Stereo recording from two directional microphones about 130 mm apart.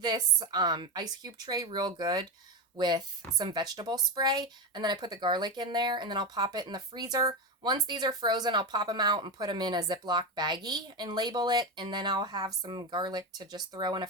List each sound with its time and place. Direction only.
0.0 s speech: 35° right (ahead or behind)